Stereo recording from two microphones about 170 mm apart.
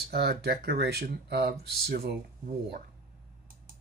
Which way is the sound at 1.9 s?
60° right (ahead or behind).